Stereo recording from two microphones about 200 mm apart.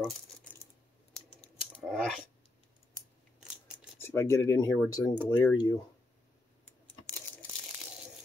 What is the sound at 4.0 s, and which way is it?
Speech, 10° left (ahead or behind).